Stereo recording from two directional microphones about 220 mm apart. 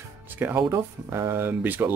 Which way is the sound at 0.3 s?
10° right (ahead or behind).